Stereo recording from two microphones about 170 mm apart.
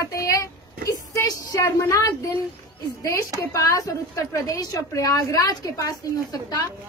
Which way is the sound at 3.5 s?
20° left (ahead or behind).